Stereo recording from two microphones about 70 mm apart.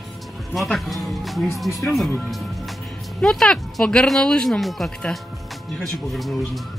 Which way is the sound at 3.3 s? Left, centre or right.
Centre.